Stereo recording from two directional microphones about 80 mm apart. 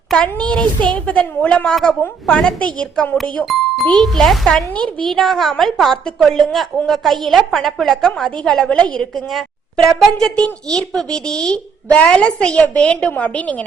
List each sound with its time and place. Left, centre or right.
0.1 s a child's voice: centre
3.4 s a child's voice: centre